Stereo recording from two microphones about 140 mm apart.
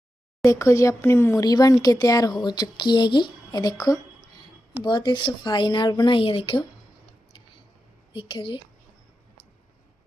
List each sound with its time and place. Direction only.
0.4 s speech: 20° left (ahead or behind); by 6.7 s 40° left (ahead or behind)
8.1 s speech: 35° left (ahead or behind)